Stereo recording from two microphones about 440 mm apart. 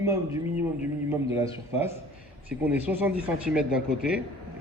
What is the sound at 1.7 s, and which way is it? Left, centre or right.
A man's voice, centre.